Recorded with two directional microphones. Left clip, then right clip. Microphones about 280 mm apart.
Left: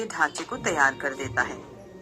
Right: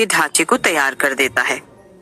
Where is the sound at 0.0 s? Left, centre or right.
Right.